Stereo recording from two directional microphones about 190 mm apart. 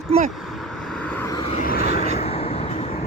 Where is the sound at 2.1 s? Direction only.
35° left (ahead or behind).